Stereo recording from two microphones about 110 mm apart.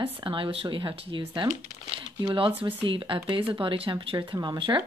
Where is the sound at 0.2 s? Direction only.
50° right (ahead or behind).